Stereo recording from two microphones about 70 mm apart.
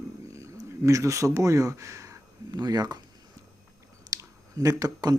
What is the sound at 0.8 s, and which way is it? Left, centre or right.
Speech, right.